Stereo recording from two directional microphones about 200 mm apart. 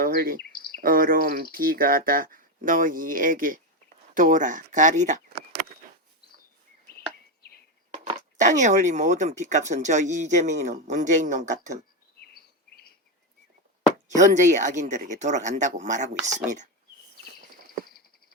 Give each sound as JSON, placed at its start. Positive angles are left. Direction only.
{"t": 0.0, "sound": "bird", "side_deg": -45}
{"t": 0.5, "sound": "bird vocalization", "side_deg": 50}
{"t": 0.8, "sound": "speech", "side_deg": -45}
{"t": 7.9, "sound": "speech", "side_deg": -35}
{"t": 12.2, "sound": "bird vocalization", "side_deg": 50}
{"t": 14.2, "sound": "speech", "side_deg": -35}